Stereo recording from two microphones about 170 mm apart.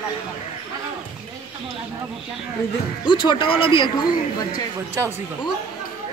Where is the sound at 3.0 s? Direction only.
30° left (ahead or behind).